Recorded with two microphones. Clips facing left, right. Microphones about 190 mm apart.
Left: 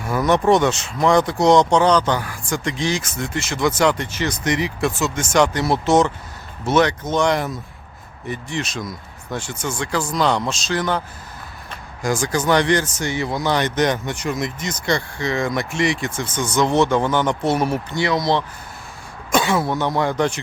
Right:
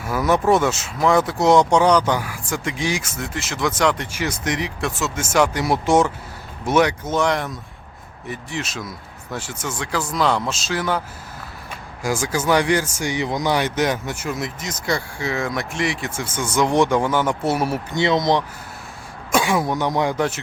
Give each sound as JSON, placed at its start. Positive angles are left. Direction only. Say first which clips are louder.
{"t": 0.0, "sound": "speech", "louder": "left 1 dB", "side_deg": -5}
{"t": 12.0, "sound": "speech", "louder": "left 1 dB", "side_deg": -5}
{"t": 17.9, "sound": "speech", "louder": "right 3 dB", "side_deg": -20}